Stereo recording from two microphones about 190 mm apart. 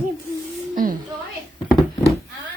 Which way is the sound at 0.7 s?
45° right (ahead or behind).